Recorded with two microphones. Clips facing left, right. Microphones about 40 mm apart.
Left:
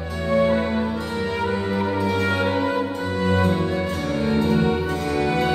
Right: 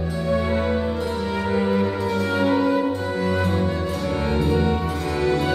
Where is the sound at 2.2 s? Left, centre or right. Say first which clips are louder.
Right 2 dB; left.